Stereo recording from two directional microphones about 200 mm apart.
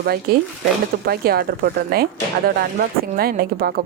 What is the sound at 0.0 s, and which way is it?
A woman's voice, 50° right (ahead or behind).